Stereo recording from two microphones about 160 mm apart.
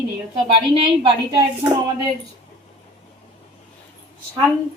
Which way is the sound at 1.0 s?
30° right (ahead or behind).